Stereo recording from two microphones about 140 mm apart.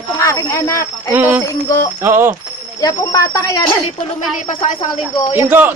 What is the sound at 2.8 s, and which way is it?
Speech, 25° left (ahead or behind).